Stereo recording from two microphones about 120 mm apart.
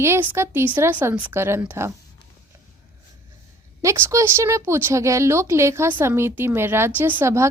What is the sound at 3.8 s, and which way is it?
Speech, 25° right (ahead or behind).